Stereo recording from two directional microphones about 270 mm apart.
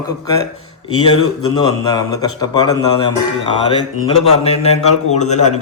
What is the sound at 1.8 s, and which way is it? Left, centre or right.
Speech, centre.